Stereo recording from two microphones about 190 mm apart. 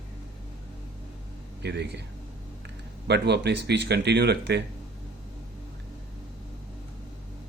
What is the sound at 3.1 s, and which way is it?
Speech, 65° right (ahead or behind).